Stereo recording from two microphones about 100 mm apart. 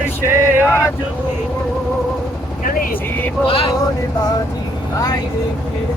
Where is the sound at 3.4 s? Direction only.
65° left (ahead or behind).